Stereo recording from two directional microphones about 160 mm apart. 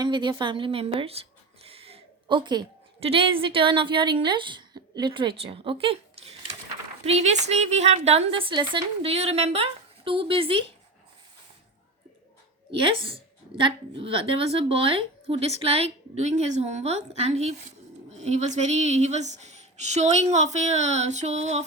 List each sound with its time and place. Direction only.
0.0 s a woman's voice: 30° right (ahead or behind)
12.7 s a woman's voice: 35° right (ahead or behind)